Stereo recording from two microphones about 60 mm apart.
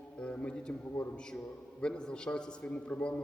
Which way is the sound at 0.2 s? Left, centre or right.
Centre.